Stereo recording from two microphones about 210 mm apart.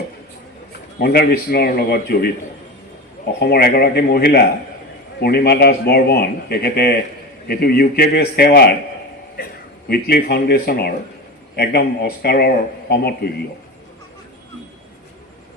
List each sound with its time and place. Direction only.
0.9 s a man's voice: 50° left (ahead or behind)
3.4 s a man's voice: 50° left (ahead or behind)
9.4 s a sound: 45° left (ahead or behind)
9.9 s a man's voice: 50° left (ahead or behind)